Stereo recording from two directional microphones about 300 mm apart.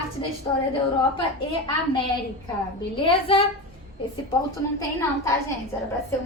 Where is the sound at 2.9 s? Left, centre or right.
Centre.